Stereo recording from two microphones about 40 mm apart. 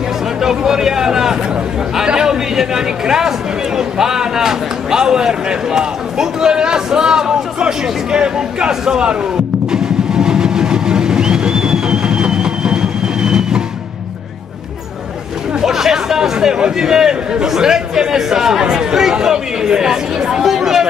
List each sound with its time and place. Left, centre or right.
0.4 s a sound: centre
2.0 s speech: centre
9.7 s vehicle: centre
15.6 s speech: centre